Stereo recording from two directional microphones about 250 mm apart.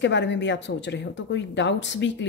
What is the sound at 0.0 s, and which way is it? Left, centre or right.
Speech, left.